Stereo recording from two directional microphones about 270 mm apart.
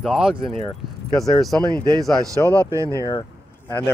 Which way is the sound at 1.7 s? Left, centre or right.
Centre.